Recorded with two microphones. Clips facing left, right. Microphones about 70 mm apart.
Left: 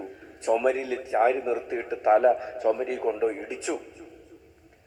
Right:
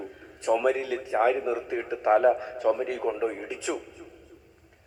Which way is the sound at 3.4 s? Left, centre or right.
Right.